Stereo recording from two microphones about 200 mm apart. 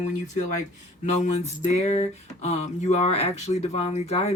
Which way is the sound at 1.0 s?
35° left (ahead or behind).